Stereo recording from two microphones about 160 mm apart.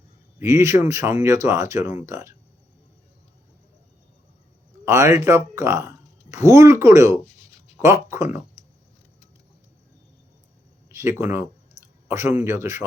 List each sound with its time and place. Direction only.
0.3 s speech: 20° right (ahead or behind)
4.9 s speech: 20° right (ahead or behind)
10.8 s speech: 15° right (ahead or behind)